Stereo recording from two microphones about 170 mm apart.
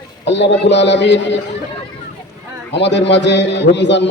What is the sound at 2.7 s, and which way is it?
A man's voice, 90° left.